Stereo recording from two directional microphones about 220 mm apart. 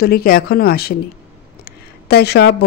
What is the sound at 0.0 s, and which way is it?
Speech, 45° left (ahead or behind).